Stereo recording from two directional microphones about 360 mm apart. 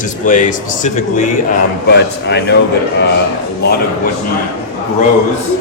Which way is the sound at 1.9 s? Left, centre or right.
Left.